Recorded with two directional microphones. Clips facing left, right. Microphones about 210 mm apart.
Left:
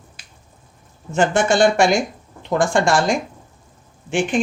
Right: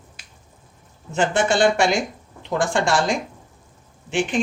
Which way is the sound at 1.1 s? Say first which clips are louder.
Left 3 dB; 45° left (ahead or behind).